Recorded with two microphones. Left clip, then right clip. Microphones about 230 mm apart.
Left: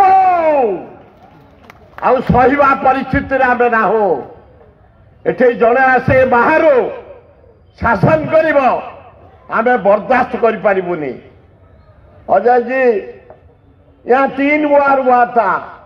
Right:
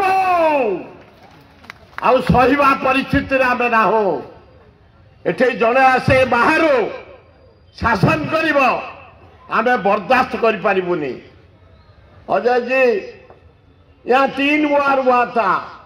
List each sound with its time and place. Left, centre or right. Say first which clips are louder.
0.0 s a sound: left 6 dB; right
2.0 s a man's voice: left 2 dB; right
5.2 s a man's voice: left 5 dB; right
12.3 s a man's voice: left 5 dB; right
14.0 s a man's voice: left 3 dB; right